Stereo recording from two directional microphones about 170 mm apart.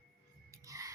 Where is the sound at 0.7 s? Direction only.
20° right (ahead or behind).